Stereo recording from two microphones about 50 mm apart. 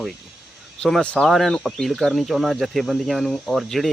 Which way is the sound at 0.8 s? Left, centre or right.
Centre.